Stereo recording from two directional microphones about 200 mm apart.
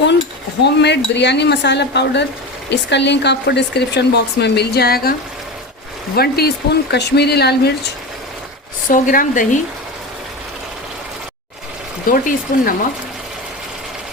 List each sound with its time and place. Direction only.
0.6 s speech: 60° left (ahead or behind)
6.1 s speech: 50° left (ahead or behind)
8.9 s speech: 40° left (ahead or behind)
12.1 s speech: 45° left (ahead or behind)